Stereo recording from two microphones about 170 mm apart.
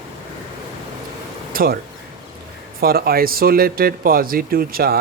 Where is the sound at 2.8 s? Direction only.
60° right (ahead or behind).